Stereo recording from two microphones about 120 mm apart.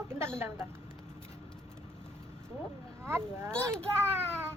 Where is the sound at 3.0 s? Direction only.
20° right (ahead or behind).